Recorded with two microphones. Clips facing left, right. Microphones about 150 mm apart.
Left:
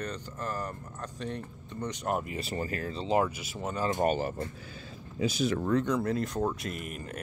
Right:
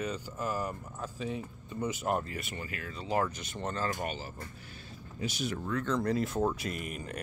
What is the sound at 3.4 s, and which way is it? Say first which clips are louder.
Speech: left 2 dB; 5° left (ahead or behind).